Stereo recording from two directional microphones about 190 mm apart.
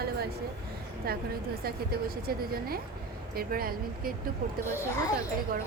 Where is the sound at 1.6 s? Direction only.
50° right (ahead or behind).